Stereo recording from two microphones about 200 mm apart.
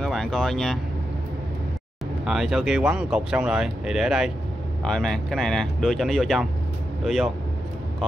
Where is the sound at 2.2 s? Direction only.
Centre (ahead or behind).